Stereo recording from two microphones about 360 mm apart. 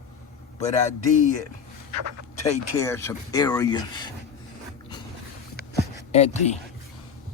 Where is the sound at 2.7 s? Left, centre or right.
Centre.